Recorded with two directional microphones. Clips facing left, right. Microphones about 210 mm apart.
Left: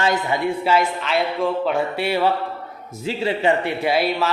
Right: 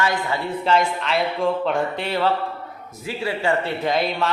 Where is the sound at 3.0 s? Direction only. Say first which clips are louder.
Left 4 dB; 25° left (ahead or behind); by 4.3 s 5° left (ahead or behind).